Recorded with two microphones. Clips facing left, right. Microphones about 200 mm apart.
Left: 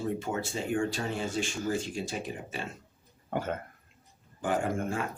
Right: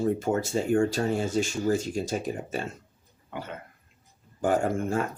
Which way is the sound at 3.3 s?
45° left (ahead or behind).